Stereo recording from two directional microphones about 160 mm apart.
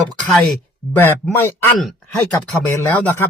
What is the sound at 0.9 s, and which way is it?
Speech, 15° left (ahead or behind).